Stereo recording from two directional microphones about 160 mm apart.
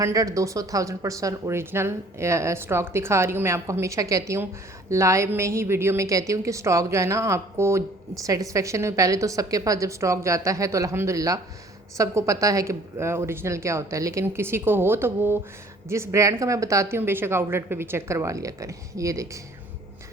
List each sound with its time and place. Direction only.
0.0 s a woman's voice: 20° right (ahead or behind)